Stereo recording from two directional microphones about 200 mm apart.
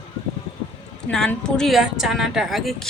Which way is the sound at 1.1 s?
5° left (ahead or behind).